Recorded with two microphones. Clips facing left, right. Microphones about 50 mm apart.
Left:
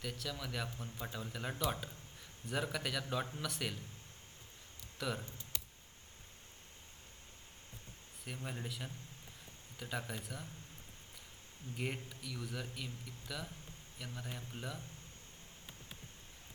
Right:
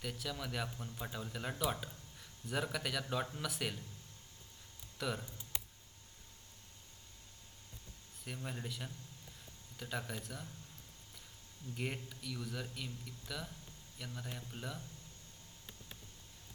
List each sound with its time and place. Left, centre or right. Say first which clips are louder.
0.0 s speech: right 1 dB; centre
4.9 s speech: even; centre
5.5 s a sound: right 2 dB; right
8.2 s speech: even; centre
11.8 s speech: even; centre